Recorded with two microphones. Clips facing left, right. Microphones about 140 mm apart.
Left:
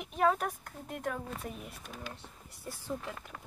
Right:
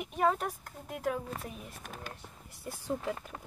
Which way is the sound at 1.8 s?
50° right (ahead or behind).